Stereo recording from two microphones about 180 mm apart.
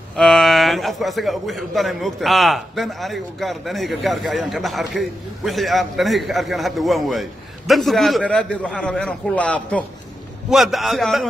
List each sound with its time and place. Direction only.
0.2 s a man's voice: centre (ahead or behind)